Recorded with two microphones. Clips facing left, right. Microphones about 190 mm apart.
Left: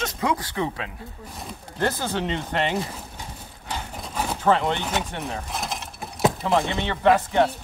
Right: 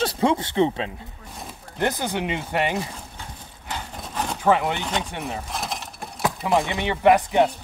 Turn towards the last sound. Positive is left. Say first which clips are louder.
# right 2 dB
turn(degrees=-15)  # may be behind; listen again after turning